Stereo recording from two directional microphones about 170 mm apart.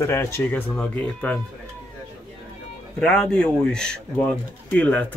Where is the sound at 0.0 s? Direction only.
15° left (ahead or behind).